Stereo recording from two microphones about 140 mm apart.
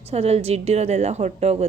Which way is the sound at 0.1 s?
50° right (ahead or behind).